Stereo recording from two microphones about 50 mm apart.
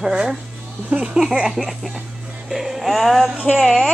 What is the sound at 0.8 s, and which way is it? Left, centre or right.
Speech, right.